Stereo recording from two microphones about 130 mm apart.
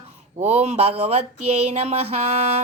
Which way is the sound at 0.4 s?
60° right (ahead or behind).